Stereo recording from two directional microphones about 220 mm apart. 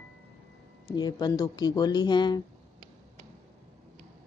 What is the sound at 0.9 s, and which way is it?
Speech, 20° left (ahead or behind).